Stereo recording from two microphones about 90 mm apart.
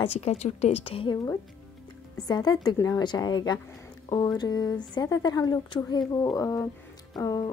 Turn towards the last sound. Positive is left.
turn(degrees=45)  # may be behind; listen again after turning